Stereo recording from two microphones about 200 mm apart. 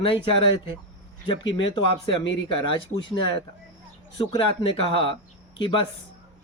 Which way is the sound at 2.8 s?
25° left (ahead or behind).